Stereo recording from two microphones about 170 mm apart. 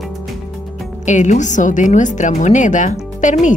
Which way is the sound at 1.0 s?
45° left (ahead or behind).